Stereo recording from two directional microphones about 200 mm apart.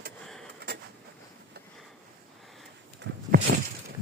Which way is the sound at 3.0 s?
55° right (ahead or behind).